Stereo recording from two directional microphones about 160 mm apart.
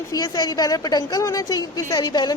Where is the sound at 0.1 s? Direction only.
25° left (ahead or behind).